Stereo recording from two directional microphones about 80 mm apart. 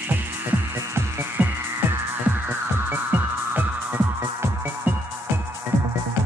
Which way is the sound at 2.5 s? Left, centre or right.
Right.